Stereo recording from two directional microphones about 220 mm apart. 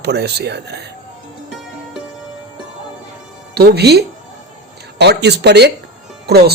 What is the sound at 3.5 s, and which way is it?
Speech, 45° right (ahead or behind).